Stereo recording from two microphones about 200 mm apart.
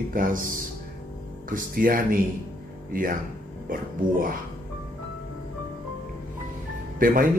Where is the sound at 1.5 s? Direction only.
45° right (ahead or behind).